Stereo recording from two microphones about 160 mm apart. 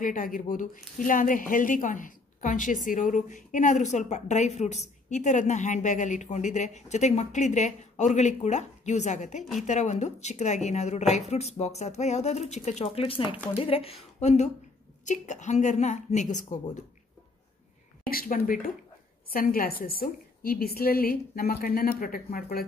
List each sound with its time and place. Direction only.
0.0 s a woman's voice: 55° left (ahead or behind)
18.1 s a woman's voice: 60° left (ahead or behind)